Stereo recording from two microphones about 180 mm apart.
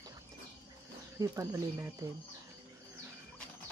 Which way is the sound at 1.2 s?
15° right (ahead or behind).